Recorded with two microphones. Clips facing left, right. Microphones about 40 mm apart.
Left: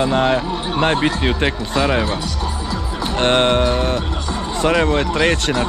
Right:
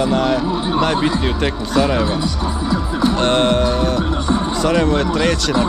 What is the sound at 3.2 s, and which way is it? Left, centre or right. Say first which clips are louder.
Speech: left 3 dB; left.